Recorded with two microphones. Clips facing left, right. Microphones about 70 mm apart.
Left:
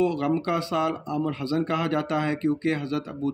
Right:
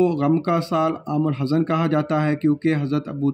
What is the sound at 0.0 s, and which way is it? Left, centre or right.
Speech, right.